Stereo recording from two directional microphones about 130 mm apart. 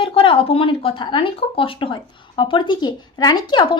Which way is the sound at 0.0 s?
45° left (ahead or behind).